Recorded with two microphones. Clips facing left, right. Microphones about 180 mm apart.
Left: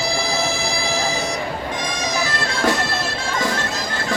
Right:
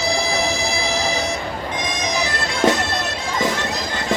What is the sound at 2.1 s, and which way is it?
Bagpipes, 20° right (ahead or behind).